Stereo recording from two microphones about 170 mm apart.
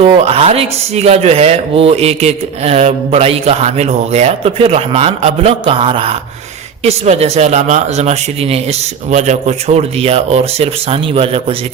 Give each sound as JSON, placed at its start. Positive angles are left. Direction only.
{"t": 0.0, "sound": "speech", "side_deg": -35}